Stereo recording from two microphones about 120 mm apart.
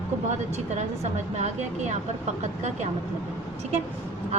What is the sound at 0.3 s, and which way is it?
A woman's voice, 70° right (ahead or behind).